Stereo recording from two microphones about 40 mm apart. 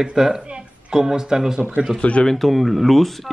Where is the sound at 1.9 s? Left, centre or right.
Left.